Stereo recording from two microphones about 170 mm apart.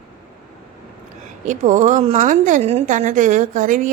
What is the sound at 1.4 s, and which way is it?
A woman's voice, 45° right (ahead or behind).